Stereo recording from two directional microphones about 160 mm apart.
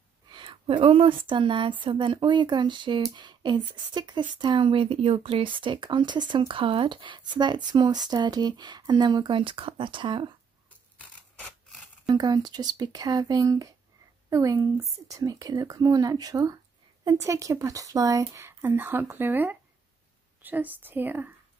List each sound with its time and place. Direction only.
0.3 s speech: 30° right (ahead or behind)
12.2 s speech: 25° right (ahead or behind)